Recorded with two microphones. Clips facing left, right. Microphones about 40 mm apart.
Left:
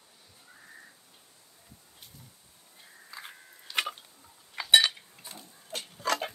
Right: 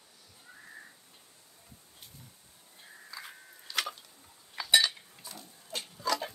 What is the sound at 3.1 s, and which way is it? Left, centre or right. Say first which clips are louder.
Biting: left 1 dB; left.